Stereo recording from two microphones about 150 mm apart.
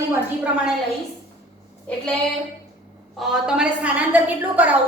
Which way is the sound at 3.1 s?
5° right (ahead or behind).